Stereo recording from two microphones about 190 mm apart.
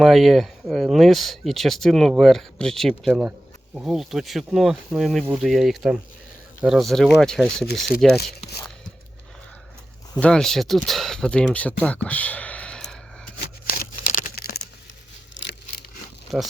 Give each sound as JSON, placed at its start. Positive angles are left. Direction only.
{"t": 0.0, "sound": "speech", "side_deg": 0}
{"t": 8.2, "sound": "speech", "side_deg": 55}
{"t": 10.2, "sound": "speech", "side_deg": 5}
{"t": 13.7, "sound": "tearing", "side_deg": 45}
{"t": 15.4, "sound": "a sound", "side_deg": 60}
{"t": 16.3, "sound": "speech", "side_deg": 0}